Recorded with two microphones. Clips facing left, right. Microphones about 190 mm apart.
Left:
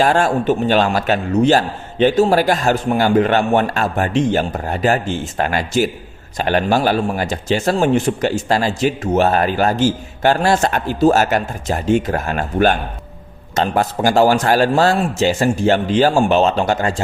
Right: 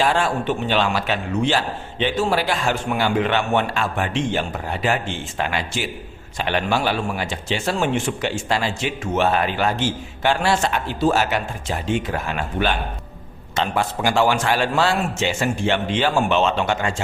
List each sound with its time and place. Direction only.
0.0 s a man's voice: 45° left (ahead or behind)